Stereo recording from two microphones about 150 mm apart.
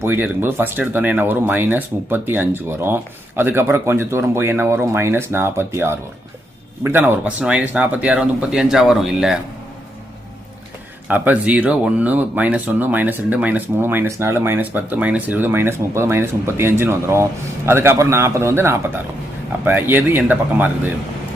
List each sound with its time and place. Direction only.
0.0 s speech: 15° right (ahead or behind)
11.1 s speech: 10° right (ahead or behind)